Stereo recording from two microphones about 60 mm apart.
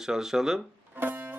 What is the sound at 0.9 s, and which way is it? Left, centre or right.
Music, right.